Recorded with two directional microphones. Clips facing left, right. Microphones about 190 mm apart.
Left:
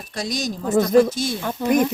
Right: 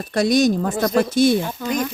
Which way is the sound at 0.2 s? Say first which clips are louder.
Right 10 dB; 60° right (ahead or behind).